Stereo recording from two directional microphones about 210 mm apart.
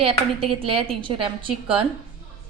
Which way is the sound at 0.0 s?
25° right (ahead or behind).